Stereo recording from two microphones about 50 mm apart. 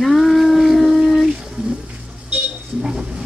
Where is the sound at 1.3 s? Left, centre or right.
Centre.